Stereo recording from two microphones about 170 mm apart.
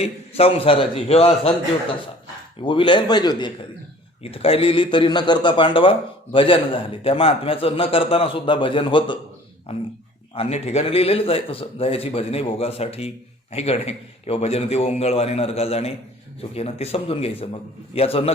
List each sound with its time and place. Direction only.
0.0 s a man's voice: 35° left (ahead or behind)
10.3 s a man's voice: 40° left (ahead or behind)